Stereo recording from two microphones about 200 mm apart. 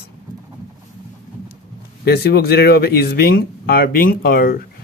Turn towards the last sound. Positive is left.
turn(degrees=45)  # may be behind; listen again after turning